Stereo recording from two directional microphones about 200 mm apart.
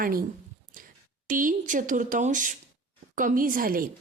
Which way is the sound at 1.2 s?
40° right (ahead or behind).